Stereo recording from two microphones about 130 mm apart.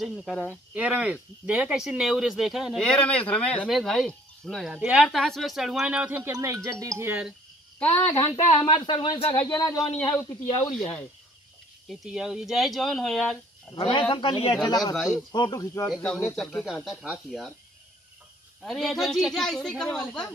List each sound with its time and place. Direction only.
0.0 s speech: centre (ahead or behind)
0.7 s speech: 10° right (ahead or behind)
2.8 s speech: 10° left (ahead or behind)
4.7 s speech: 10° right (ahead or behind)
6.3 s speech: 25° right (ahead or behind)
7.8 s speech: 15° left (ahead or behind)
8.5 s speech: 35° left (ahead or behind)
9.5 s speech: 30° left (ahead or behind)
11.9 s speech: 5° right (ahead or behind)
13.7 s speech: 40° left (ahead or behind)
14.5 s speech: 30° left (ahead or behind)
16.0 s speech: 5° left (ahead or behind)
18.6 s speech: centre (ahead or behind)